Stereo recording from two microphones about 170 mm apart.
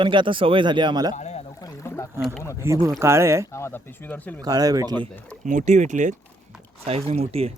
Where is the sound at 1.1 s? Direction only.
40° left (ahead or behind).